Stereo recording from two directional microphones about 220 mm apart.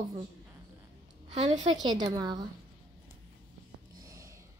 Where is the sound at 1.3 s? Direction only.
30° right (ahead or behind).